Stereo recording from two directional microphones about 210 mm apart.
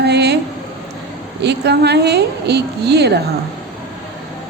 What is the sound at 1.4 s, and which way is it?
A woman's voice, 55° right (ahead or behind).